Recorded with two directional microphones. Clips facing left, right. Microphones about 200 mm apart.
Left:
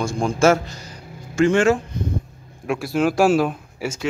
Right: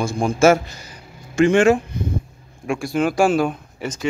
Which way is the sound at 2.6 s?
Centre (ahead or behind).